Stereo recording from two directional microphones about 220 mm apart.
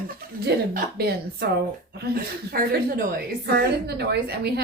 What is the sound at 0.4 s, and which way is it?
A woman's voice, 45° right (ahead or behind).